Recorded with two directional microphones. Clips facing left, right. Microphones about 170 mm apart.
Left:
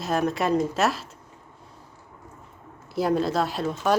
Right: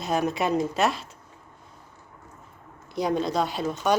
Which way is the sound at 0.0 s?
Centre (ahead or behind).